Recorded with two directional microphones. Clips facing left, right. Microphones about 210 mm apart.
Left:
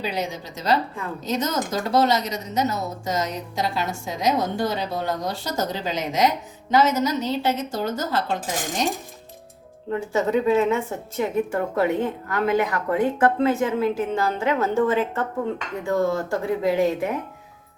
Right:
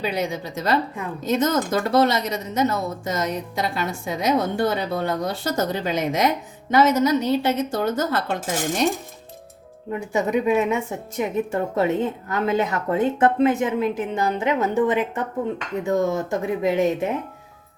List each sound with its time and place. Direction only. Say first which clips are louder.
0.0 s speech: right 3 dB; 55° right (ahead or behind)
9.9 s a woman's voice: even; 15° right (ahead or behind)